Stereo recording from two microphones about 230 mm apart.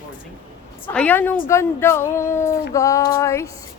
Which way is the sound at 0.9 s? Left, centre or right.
Centre.